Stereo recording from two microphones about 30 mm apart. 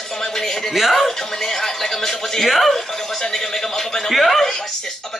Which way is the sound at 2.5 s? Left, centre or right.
Centre.